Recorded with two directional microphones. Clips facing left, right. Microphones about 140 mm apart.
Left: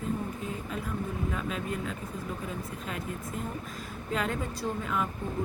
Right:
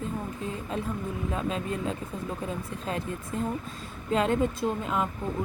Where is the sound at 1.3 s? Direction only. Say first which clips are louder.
Right 3 dB; 25° right (ahead or behind).